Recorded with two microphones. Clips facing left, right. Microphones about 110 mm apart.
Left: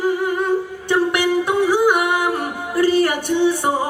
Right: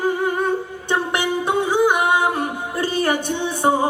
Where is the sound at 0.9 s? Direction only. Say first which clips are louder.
Left 4 dB; 25° right (ahead or behind).